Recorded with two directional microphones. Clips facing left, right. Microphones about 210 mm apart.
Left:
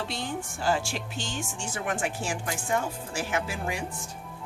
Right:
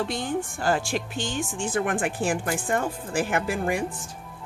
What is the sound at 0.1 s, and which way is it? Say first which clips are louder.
Speech: right 6 dB; 50° right (ahead or behind).